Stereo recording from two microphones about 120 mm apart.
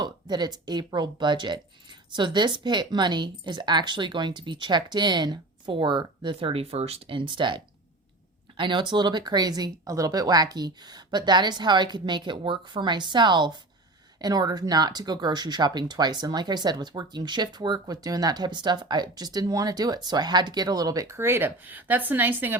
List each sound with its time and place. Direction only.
0.0 s speech: 35° right (ahead or behind); by 22.5 s 15° right (ahead or behind)